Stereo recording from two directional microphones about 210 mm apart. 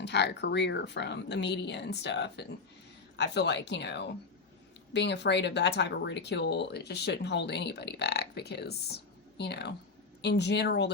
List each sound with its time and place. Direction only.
0.0 s speech: 55° left (ahead or behind)